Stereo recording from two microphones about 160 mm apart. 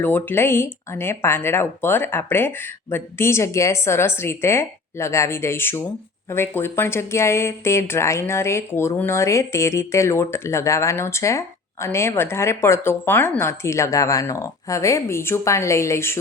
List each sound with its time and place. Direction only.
0.0 s speech: 15° left (ahead or behind)